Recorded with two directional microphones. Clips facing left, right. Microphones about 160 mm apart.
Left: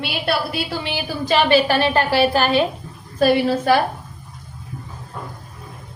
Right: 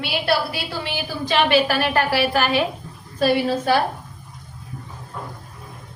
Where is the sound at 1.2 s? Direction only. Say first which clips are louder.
Left 2 dB; centre (ahead or behind).